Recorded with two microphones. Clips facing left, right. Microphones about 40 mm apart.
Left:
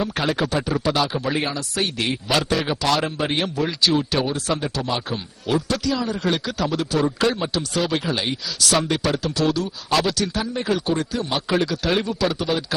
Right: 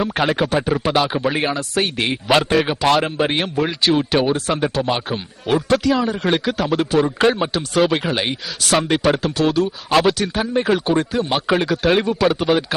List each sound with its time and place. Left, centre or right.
0.0 s speech: right